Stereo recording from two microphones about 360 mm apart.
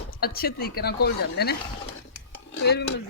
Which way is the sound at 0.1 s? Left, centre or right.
Left.